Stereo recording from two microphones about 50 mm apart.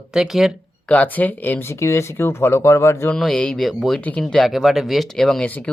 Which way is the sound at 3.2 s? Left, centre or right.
Centre.